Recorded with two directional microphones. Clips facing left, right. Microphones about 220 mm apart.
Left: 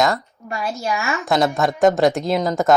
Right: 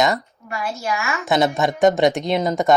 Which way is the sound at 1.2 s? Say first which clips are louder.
Right 1 dB; centre (ahead or behind).